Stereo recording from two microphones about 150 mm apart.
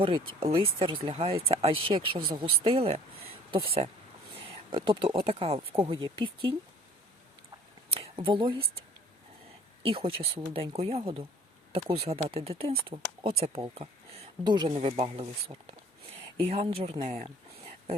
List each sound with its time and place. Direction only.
0.5 s speech: 35° right (ahead or behind)
7.9 s a sound: 35° right (ahead or behind)
9.8 s speech: 40° right (ahead or behind)
14.4 s speech: 30° right (ahead or behind)
14.8 s speech: 45° right (ahead or behind)